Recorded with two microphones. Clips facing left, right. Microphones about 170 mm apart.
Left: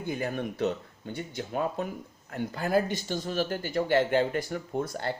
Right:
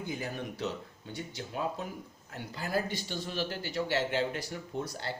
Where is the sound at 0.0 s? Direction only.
55° left (ahead or behind).